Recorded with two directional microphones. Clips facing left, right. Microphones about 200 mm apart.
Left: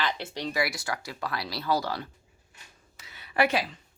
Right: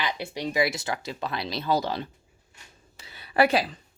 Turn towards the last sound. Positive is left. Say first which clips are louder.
# right 4 dB
turn(degrees=-35)  # may be behind; listen again after turning